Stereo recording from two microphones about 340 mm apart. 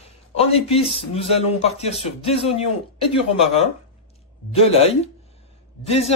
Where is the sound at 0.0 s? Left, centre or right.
Centre.